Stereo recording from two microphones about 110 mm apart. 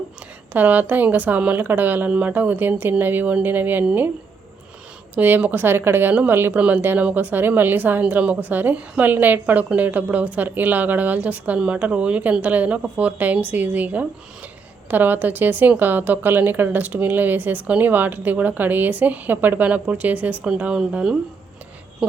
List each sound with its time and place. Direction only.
0.5 s a woman's voice: 15° right (ahead or behind)
5.1 s a woman's voice: 15° right (ahead or behind)